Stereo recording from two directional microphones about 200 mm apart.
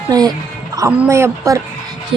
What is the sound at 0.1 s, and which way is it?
Speech, 20° right (ahead or behind).